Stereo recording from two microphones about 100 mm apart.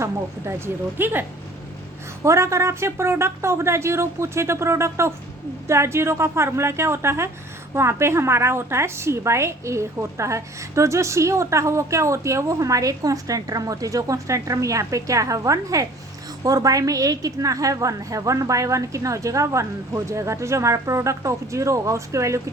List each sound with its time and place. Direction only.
0.0 s speech: 25° right (ahead or behind)
2.2 s a woman's voice: 30° right (ahead or behind)